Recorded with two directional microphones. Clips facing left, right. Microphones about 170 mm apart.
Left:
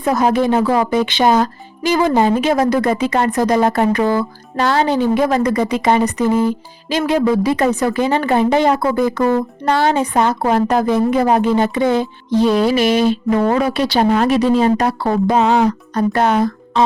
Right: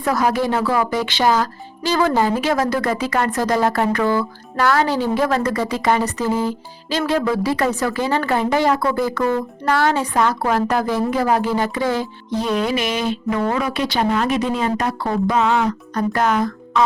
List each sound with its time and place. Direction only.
0.0 s speech: 20° left (ahead or behind)